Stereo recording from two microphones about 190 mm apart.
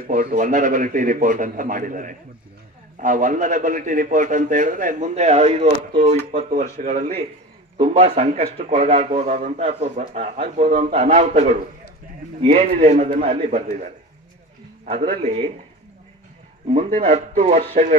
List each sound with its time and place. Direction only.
0.0 s a man's voice: 45° right (ahead or behind)
16.6 s speech: 35° right (ahead or behind)